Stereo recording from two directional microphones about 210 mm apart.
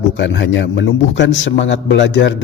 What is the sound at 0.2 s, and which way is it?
Speech, 60° left (ahead or behind).